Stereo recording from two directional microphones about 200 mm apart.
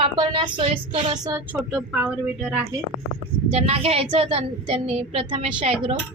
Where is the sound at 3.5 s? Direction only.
30° right (ahead or behind).